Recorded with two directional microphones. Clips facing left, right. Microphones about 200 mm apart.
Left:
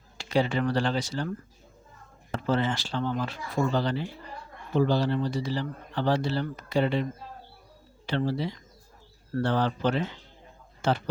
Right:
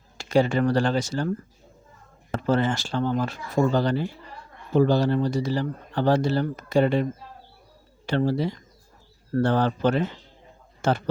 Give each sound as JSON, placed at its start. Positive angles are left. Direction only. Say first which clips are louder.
{"t": 0.2, "sound": "speech", "louder": "right 5 dB", "side_deg": -45}
{"t": 2.3, "sound": "speech", "louder": "right 4 dB", "side_deg": -45}